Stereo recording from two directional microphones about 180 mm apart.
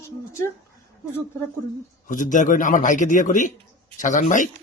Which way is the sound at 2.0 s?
45° left (ahead or behind).